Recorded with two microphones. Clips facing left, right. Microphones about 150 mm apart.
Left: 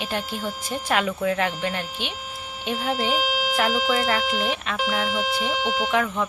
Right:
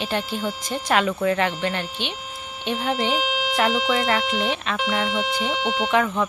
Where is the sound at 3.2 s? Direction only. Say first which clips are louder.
Even; 40° left (ahead or behind).